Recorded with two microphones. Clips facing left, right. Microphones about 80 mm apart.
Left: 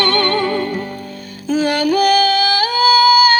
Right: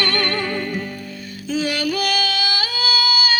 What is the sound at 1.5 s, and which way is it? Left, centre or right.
Yodeling, left.